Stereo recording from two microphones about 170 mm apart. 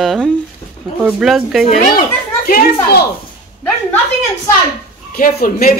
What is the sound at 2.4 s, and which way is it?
Speech, 65° left (ahead or behind).